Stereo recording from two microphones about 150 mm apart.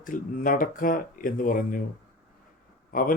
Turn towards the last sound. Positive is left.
turn(degrees=65)  # may be behind; listen again after turning